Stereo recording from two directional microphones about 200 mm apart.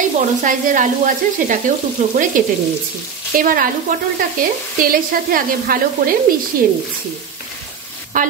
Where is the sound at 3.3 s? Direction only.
45° right (ahead or behind).